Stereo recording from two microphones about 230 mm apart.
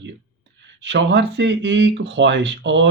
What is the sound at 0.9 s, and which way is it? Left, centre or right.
Speech, right.